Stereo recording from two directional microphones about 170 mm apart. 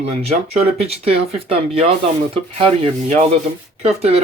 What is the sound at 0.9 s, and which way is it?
Speech, 35° right (ahead or behind).